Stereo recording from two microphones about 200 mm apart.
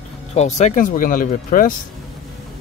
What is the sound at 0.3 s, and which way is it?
Speech, 35° left (ahead or behind).